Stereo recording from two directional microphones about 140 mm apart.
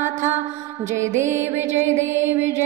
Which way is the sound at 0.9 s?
20° right (ahead or behind).